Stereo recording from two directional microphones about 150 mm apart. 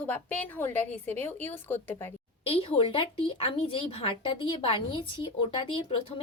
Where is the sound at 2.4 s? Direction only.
40° left (ahead or behind).